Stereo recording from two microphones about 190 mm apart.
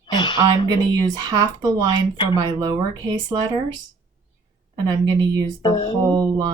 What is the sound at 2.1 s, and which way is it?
Speech, 25° left (ahead or behind).